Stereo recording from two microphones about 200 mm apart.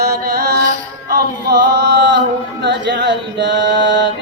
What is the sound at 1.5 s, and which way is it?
Singing, 60° right (ahead or behind).